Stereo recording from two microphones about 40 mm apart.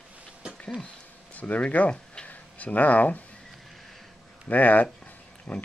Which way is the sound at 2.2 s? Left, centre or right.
Left.